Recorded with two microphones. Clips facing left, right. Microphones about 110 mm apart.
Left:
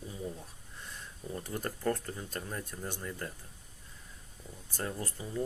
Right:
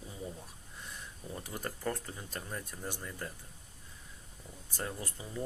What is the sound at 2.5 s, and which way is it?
Speech, centre (ahead or behind).